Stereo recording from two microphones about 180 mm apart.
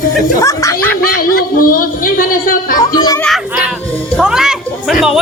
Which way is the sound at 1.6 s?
50° left (ahead or behind).